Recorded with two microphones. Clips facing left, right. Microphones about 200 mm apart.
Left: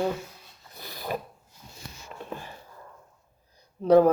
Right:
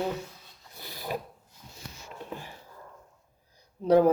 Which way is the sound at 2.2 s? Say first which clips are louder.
Left 2 dB; 15° right (ahead or behind).